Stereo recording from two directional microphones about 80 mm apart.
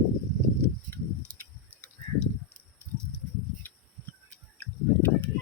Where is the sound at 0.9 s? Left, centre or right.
Left.